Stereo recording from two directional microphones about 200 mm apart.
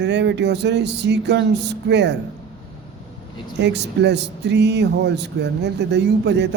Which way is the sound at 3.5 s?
60° right (ahead or behind).